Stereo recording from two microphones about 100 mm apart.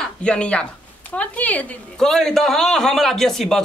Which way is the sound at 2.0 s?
5° left (ahead or behind).